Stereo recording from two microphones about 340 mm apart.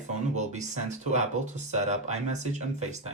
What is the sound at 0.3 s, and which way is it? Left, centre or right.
Speech, right.